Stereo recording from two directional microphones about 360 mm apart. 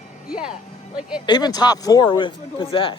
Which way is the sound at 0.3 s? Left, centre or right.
Centre.